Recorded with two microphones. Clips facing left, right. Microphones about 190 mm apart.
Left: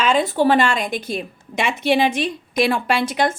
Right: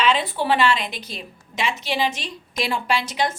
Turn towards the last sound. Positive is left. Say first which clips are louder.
# left 4 dB
turn(degrees=55)  # may be behind; listen again after turning